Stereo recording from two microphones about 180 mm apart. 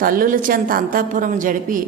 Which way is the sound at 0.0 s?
50° right (ahead or behind).